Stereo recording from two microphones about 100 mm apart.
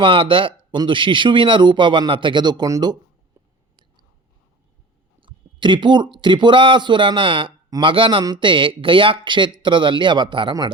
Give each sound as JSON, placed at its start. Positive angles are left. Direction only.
{"t": 0.0, "sound": "speech", "side_deg": -60}
{"t": 5.2, "sound": "speech", "side_deg": -50}